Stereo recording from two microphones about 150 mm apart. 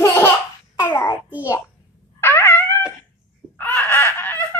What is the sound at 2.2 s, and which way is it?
Dog, 15° left (ahead or behind).